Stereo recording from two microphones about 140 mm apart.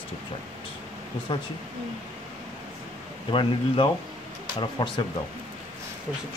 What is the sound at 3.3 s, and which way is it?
Speech, 35° left (ahead or behind).